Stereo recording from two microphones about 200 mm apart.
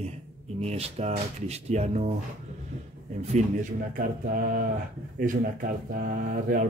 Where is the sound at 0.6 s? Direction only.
30° right (ahead or behind).